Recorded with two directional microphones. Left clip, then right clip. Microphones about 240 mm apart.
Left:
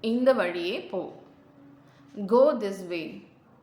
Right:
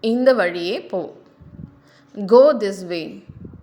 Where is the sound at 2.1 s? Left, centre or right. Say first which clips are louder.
Right 9 dB; right.